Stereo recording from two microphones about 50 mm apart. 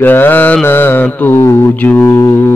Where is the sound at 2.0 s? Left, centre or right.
Left.